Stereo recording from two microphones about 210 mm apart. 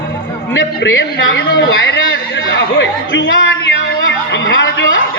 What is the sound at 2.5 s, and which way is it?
Chatter, 60° left (ahead or behind).